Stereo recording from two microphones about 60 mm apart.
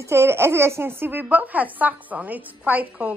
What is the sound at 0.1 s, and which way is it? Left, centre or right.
A woman's voice, right.